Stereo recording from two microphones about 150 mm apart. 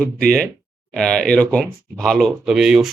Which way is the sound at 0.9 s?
5° left (ahead or behind).